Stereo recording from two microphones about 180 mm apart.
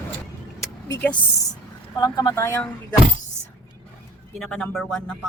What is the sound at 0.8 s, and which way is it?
Speech, 10° left (ahead or behind).